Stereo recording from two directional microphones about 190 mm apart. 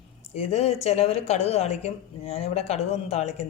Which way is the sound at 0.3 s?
35° left (ahead or behind).